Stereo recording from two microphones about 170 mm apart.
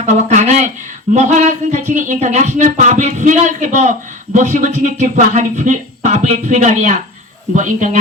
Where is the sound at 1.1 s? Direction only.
45° right (ahead or behind).